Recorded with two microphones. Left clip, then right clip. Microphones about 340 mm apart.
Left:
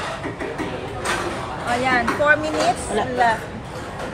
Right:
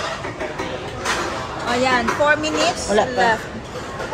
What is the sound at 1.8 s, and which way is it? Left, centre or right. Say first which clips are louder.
Speech: right 2 dB; centre.